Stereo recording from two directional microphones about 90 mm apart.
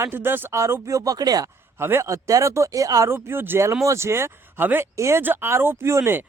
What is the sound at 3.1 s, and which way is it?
Speech, 25° right (ahead or behind).